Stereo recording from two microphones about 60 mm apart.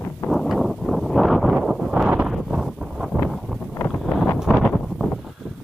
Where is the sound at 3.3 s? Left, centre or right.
Centre.